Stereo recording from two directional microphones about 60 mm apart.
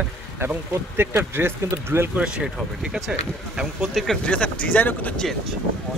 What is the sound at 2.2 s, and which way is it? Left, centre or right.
Speech, centre.